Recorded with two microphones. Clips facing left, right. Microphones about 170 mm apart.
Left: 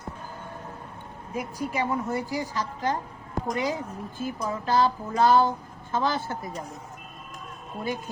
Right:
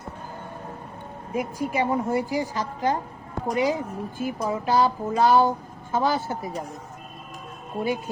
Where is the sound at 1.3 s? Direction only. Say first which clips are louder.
Right 4 dB; 15° right (ahead or behind).